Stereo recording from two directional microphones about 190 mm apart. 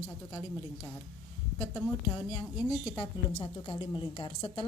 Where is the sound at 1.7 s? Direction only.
20° left (ahead or behind).